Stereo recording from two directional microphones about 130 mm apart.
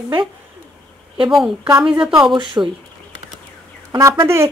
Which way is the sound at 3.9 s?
25° right (ahead or behind).